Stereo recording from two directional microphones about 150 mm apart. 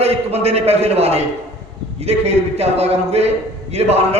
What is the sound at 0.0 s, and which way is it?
A man's voice, 45° right (ahead or behind).